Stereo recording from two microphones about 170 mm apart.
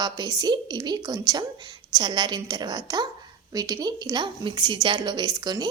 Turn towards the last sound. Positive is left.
turn(degrees=-25)  # may be behind; listen again after turning